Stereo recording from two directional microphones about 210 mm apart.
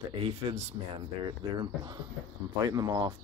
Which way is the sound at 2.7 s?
15° right (ahead or behind).